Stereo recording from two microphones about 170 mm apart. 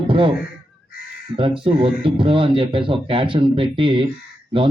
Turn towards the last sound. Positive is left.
turn(degrees=-30)  # may be behind; listen again after turning